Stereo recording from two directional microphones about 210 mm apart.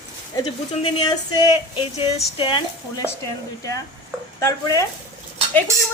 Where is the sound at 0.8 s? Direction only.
20° left (ahead or behind).